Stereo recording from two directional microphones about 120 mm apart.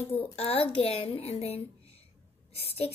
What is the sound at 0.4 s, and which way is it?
A woman's voice, 50° left (ahead or behind).